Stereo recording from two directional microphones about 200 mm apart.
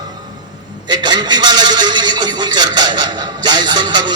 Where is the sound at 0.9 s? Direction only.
20° right (ahead or behind).